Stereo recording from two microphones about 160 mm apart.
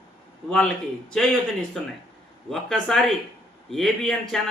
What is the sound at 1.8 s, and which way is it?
Speech, 5° left (ahead or behind).